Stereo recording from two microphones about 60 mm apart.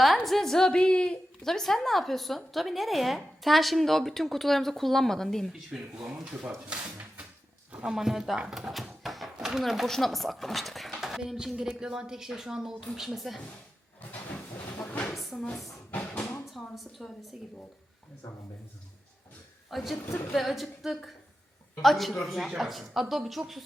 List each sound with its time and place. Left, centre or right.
0.0 s a woman's voice: centre
5.5 s a woman's voice: centre
7.9 s a woman's voice: centre
8.4 s chopping: centre
9.3 s a woman's voice: centre
14.1 s train: left
15.1 s a sound: centre
16.1 s a sound: centre
16.5 s a woman's voice: centre
19.7 s a woman's voice: centre